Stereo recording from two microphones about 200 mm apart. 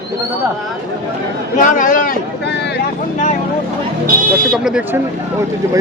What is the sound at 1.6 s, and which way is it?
Speech, 40° left (ahead or behind).